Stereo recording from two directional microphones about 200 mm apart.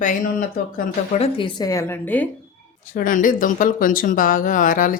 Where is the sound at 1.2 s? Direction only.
25° left (ahead or behind); by 2.3 s 10° left (ahead or behind).